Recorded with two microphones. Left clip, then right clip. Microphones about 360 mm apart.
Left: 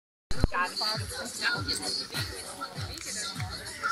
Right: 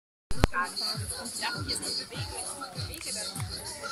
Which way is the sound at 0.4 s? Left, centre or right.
Right.